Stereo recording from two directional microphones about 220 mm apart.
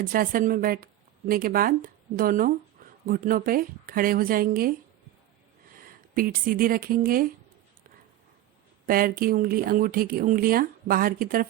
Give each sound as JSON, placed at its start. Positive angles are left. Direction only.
{"t": 0.0, "sound": "speech", "side_deg": -40}
{"t": 6.1, "sound": "speech", "side_deg": -40}
{"t": 8.9, "sound": "speech", "side_deg": -40}